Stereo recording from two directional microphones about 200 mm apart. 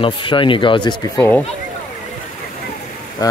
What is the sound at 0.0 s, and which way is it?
Speech, 25° left (ahead or behind).